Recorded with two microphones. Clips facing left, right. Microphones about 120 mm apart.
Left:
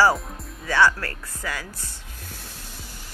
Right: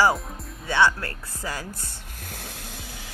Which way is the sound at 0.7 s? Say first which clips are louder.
Left 1 dB; 25° right (ahead or behind).